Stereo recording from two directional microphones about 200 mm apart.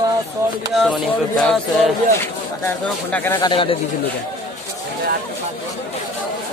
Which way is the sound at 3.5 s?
25° left (ahead or behind).